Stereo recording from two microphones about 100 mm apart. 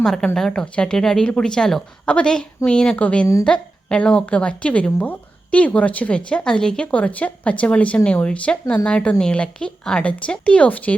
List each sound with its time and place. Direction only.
0.0 s a woman's voice: 5° left (ahead or behind)